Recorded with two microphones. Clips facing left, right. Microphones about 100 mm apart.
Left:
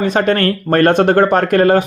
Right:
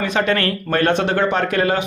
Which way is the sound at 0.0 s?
40° left (ahead or behind).